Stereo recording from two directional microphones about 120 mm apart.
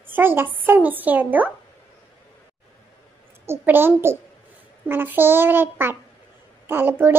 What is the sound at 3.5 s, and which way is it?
A woman's voice, 20° right (ahead or behind).